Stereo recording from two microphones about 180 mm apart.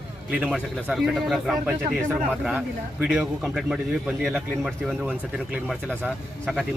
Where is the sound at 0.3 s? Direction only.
5° right (ahead or behind).